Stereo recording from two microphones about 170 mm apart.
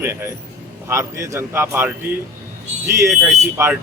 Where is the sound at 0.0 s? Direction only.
15° right (ahead or behind).